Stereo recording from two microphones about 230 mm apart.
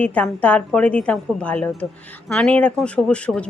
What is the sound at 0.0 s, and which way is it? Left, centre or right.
A woman's voice, centre.